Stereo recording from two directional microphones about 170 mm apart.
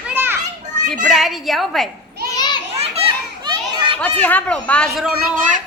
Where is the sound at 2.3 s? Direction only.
25° left (ahead or behind).